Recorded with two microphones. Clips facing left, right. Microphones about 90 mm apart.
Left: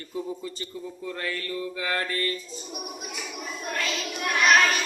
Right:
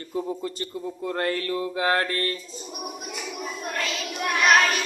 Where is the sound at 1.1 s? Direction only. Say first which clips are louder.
Right 6 dB; 60° right (ahead or behind).